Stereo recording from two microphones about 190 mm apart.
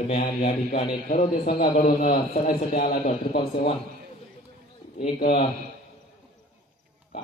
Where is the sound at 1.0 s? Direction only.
45° left (ahead or behind).